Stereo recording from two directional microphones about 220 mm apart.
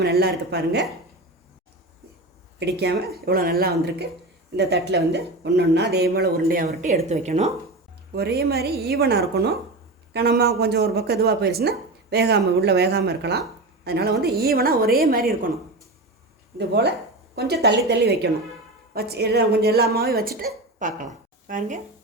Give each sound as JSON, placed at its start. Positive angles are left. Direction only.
{"t": 0.0, "sound": "speech", "side_deg": -45}
{"t": 2.6, "sound": "speech", "side_deg": -45}
{"t": 8.1, "sound": "speech", "side_deg": -45}
{"t": 16.6, "sound": "speech", "side_deg": -50}